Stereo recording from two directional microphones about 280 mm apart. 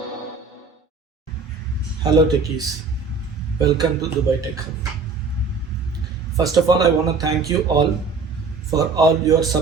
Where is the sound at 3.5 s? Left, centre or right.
Centre.